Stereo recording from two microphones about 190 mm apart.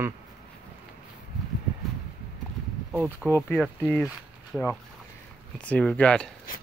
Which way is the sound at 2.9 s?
15° right (ahead or behind).